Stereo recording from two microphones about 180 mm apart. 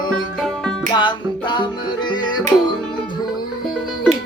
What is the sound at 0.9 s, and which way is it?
Music, 25° left (ahead or behind).